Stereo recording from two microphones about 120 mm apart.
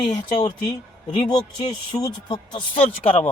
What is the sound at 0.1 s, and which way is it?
Speech, 35° left (ahead or behind).